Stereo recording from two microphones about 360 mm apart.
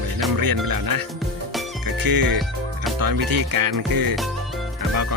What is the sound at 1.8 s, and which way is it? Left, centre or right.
Music, right.